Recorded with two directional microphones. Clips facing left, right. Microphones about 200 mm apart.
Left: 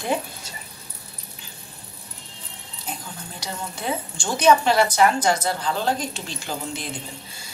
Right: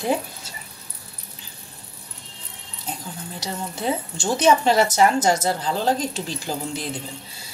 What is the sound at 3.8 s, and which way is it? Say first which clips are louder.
A woman's voice: right 4 dB; 25° right (ahead or behind).